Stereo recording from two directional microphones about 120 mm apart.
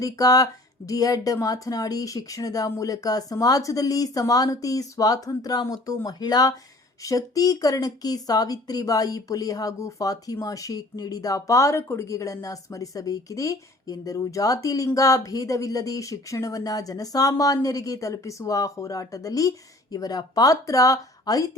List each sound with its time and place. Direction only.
0.0 s speech: 30° left (ahead or behind)